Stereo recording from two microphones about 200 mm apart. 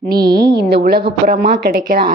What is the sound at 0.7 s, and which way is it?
A woman's voice, 50° right (ahead or behind).